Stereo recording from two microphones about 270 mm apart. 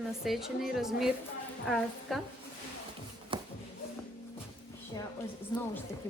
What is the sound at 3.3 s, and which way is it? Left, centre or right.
Music, centre.